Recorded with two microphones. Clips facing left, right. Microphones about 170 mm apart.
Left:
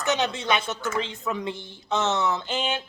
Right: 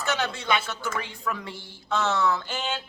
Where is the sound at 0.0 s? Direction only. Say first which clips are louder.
Left 3 dB; 20° left (ahead or behind).